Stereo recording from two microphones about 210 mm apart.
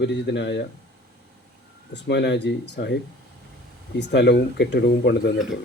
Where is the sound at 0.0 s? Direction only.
55° left (ahead or behind).